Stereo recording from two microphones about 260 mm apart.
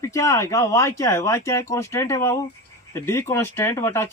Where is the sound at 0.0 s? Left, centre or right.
Centre.